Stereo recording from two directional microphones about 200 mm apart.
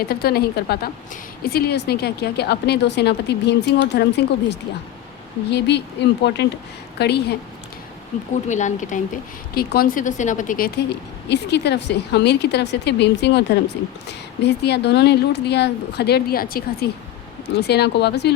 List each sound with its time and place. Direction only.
0.1 s a woman's voice: 50° left (ahead or behind)
8.4 s speech: 40° left (ahead or behind)
11.3 s a woman's voice: 60° left (ahead or behind)